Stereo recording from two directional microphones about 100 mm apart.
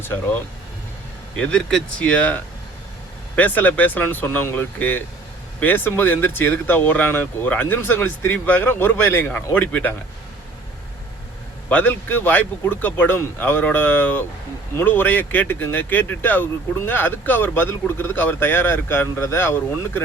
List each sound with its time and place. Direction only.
1.4 s speech: 10° left (ahead or behind)
11.7 s speech: 20° left (ahead or behind)